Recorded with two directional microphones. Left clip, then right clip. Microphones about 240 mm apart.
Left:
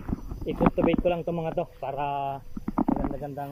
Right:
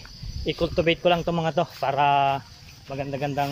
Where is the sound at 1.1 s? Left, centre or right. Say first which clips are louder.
Right 5 dB; right.